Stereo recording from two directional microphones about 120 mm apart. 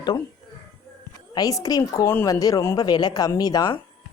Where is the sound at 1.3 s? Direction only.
30° left (ahead or behind).